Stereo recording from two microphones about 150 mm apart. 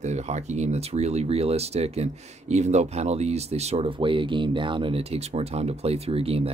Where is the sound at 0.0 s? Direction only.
50° right (ahead or behind).